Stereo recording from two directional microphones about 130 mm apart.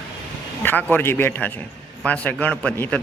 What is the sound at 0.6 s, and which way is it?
A man's voice, 15° left (ahead or behind).